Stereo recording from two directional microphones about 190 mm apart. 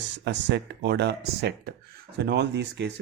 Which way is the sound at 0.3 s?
65° right (ahead or behind).